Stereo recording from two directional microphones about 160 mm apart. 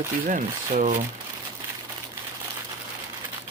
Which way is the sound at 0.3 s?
55° right (ahead or behind).